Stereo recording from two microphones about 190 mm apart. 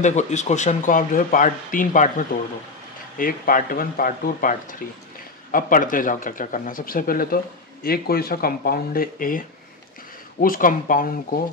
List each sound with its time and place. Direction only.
0.0 s speech: 40° left (ahead or behind)
10.4 s speech: 45° left (ahead or behind)